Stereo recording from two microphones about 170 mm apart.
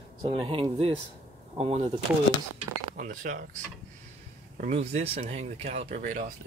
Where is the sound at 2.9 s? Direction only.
50° right (ahead or behind).